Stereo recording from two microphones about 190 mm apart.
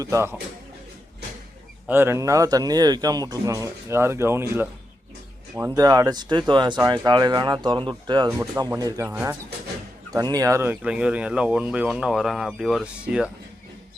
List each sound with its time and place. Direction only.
0.0 s speech: 15° right (ahead or behind)
1.9 s speech: 10° right (ahead or behind)
9.0 s speech: 5° right (ahead or behind)
10.1 s speech: 20° right (ahead or behind)